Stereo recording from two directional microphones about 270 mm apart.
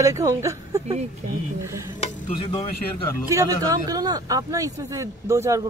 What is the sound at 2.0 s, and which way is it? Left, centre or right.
Speech, centre.